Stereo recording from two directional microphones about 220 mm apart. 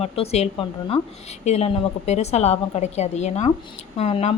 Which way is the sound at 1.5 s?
30° left (ahead or behind).